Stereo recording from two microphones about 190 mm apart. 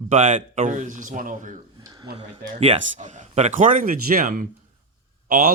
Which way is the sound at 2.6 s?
35° right (ahead or behind).